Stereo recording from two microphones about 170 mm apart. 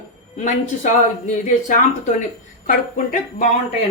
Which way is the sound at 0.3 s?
45° left (ahead or behind).